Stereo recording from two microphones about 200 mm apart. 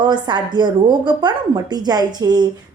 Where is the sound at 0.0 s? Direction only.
20° right (ahead or behind).